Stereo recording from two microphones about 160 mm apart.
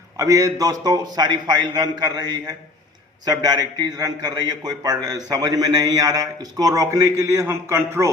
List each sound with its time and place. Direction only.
0.2 s a man's voice: 20° right (ahead or behind)